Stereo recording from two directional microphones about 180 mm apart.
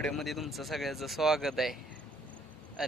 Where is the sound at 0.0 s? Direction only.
Centre (ahead or behind).